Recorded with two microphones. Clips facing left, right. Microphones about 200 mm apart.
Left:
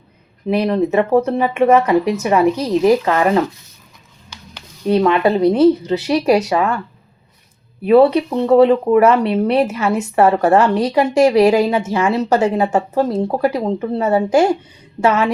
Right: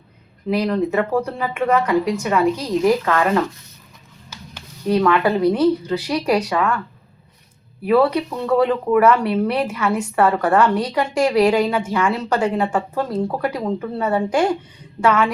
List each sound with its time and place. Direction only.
0.4 s a woman's voice: 25° left (ahead or behind)
4.5 s a woman's voice: 25° left (ahead or behind)
7.9 s a woman's voice: 25° left (ahead or behind)